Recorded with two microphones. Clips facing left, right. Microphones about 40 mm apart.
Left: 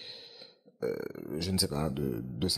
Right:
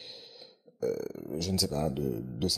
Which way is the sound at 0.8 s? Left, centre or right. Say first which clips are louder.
Right 2 dB; left.